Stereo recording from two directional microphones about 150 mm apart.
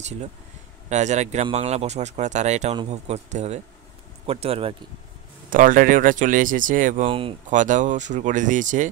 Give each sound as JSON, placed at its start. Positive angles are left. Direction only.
{"t": 0.8, "sound": "speech", "side_deg": -50}
{"t": 5.5, "sound": "speech", "side_deg": -65}
{"t": 7.1, "sound": "speech", "side_deg": -35}
{"t": 7.4, "sound": "speech", "side_deg": -55}